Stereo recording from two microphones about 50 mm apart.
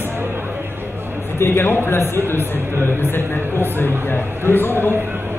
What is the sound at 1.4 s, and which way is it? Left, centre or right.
A man's voice, left.